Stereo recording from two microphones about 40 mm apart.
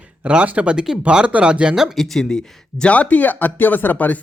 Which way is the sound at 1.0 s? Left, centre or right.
Right.